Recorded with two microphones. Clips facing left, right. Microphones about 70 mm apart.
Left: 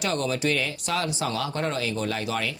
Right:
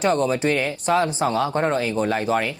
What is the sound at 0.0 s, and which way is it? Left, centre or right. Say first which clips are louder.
Speech: right 6 dB; right.